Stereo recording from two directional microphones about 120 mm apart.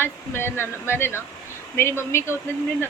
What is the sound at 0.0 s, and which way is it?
Speech, 20° left (ahead or behind).